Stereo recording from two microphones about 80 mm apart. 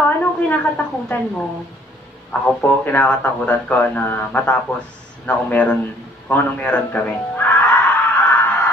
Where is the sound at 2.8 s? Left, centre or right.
Left.